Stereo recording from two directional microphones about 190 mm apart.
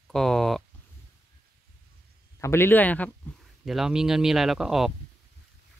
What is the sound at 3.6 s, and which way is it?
Speech, centre (ahead or behind).